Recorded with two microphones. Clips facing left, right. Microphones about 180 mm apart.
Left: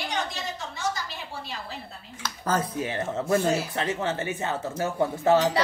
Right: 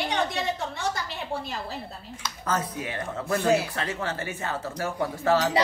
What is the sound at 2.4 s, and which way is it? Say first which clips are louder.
Speech: left 2 dB; 30° left (ahead or behind).